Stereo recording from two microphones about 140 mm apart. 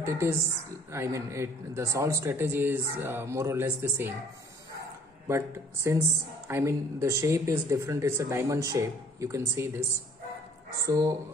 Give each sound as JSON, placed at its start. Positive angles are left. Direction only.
{"t": 0.0, "sound": "speech", "side_deg": -20}
{"t": 5.3, "sound": "speech", "side_deg": -20}